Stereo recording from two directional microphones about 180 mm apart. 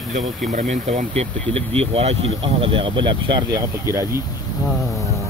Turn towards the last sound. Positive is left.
turn(degrees=-15)  # may be behind; listen again after turning